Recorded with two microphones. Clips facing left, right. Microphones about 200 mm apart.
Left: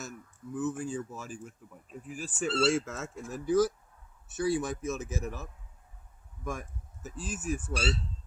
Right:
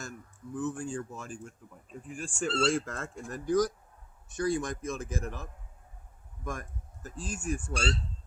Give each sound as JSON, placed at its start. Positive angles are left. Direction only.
{"t": 0.0, "sound": "speech", "side_deg": 5}